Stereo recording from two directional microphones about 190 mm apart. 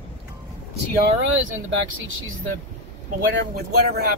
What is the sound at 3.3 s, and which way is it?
Speech, 65° right (ahead or behind).